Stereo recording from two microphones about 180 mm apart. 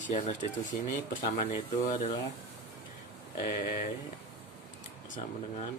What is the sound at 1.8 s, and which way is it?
Speech, 35° left (ahead or behind).